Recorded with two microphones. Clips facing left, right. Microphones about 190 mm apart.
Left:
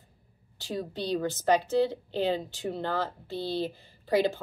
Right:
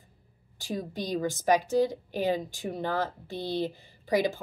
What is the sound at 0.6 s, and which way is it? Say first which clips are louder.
A woman's voice: even; 10° right (ahead or behind).